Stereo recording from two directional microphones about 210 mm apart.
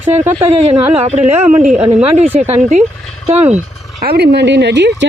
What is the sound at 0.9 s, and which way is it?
Speech, 30° right (ahead or behind).